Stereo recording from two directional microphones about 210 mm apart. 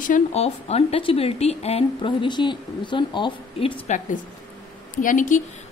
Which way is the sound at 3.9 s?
35° left (ahead or behind).